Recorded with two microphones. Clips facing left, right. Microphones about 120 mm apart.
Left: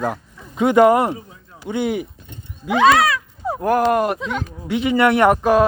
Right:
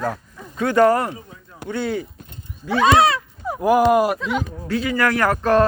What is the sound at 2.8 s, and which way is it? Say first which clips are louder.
Speech: left 1 dB; 25° right (ahead or behind).